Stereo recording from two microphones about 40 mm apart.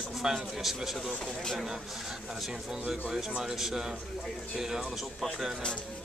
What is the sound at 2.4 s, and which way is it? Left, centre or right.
Speech, centre.